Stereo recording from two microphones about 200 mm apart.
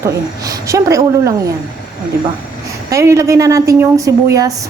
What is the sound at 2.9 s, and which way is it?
A woman's voice, 15° right (ahead or behind).